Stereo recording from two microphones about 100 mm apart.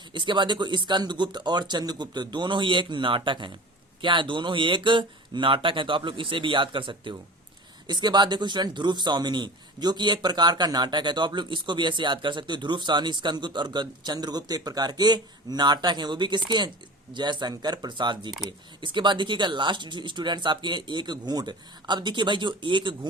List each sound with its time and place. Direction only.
0.1 s a man's voice: 55° right (ahead or behind)